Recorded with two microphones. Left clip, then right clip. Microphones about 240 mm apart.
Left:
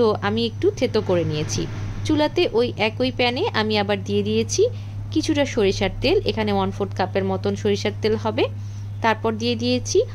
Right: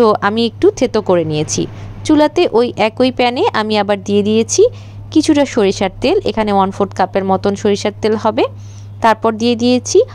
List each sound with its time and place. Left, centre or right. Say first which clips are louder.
0.0 s speech: right 8 dB; right